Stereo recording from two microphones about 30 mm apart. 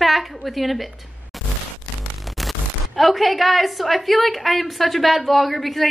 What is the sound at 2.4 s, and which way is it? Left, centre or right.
Speech, centre.